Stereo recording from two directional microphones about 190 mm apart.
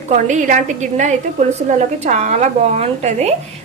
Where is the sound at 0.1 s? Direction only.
40° right (ahead or behind).